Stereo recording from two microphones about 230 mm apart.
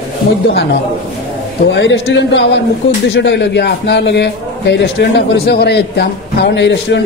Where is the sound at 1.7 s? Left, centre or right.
Left.